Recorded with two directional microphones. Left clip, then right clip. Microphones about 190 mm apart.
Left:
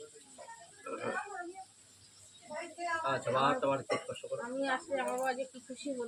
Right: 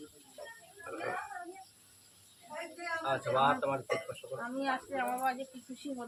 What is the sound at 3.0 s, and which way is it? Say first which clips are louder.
Speech: right 2 dB; 25° right (ahead or behind).